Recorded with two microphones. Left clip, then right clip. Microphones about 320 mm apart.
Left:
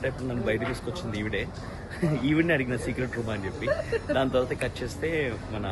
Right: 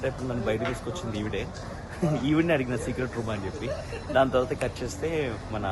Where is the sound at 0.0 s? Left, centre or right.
Centre.